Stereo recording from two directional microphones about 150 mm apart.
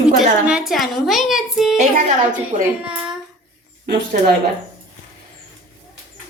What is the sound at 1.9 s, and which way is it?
Speech, 55° right (ahead or behind).